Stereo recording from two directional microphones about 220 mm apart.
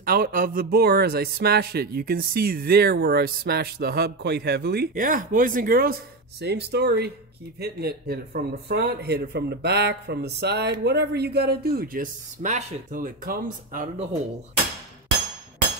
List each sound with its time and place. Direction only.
0.0 s speech: 40° right (ahead or behind)